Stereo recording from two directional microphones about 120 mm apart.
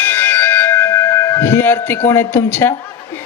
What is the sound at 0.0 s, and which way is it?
Music, 15° left (ahead or behind).